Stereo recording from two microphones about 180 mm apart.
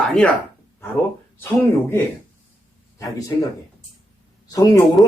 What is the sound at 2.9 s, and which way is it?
Speech, 20° left (ahead or behind).